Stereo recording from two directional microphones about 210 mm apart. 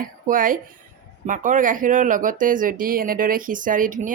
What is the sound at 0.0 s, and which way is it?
Speech, 40° right (ahead or behind).